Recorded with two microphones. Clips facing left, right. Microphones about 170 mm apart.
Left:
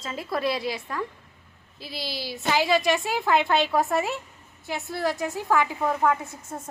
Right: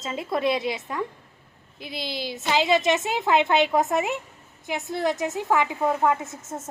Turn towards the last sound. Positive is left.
turn(degrees=-20)  # may be behind; listen again after turning